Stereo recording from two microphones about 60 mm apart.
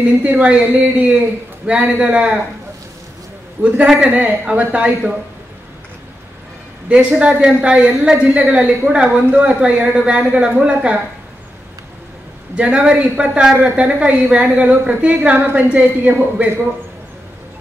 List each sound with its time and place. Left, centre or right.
0.2 s a woman's voice: right
3.6 s a man's voice: right
4.0 s a woman's voice: right
6.9 s a man's voice: centre
12.5 s a woman's voice: centre